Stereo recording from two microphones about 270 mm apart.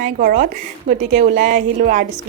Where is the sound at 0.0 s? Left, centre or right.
Right.